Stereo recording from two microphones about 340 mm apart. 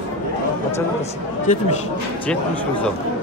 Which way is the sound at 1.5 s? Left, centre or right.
Left.